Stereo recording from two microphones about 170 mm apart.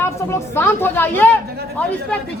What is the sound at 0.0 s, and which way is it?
A woman's voice, 15° left (ahead or behind).